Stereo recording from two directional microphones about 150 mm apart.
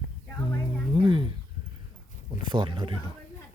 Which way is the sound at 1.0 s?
35° right (ahead or behind).